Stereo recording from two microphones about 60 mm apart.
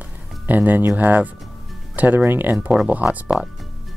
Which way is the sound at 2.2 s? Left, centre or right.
Right.